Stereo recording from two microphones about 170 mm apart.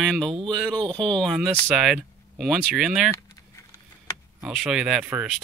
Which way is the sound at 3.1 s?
20° left (ahead or behind).